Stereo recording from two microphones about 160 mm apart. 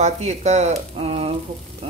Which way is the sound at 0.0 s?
45° right (ahead or behind).